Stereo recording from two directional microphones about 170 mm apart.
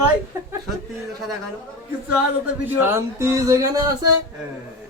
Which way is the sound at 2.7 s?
15° right (ahead or behind).